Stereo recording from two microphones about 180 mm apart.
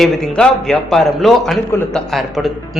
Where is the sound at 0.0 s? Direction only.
5° left (ahead or behind).